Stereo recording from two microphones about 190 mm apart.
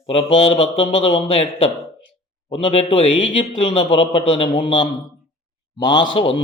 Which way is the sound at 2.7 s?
30° left (ahead or behind).